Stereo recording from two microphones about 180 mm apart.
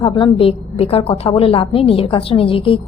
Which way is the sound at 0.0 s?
25° left (ahead or behind).